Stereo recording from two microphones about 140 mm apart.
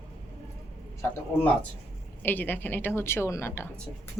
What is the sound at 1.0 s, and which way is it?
A woman's voice, 15° left (ahead or behind).